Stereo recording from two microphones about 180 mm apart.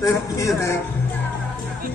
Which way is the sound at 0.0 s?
15° left (ahead or behind).